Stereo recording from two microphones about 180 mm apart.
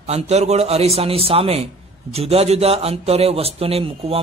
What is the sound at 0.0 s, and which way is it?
Speech, 35° right (ahead or behind).